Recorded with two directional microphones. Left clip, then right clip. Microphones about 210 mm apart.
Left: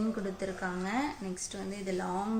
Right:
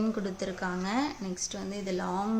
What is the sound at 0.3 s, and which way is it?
Speech, 45° right (ahead or behind).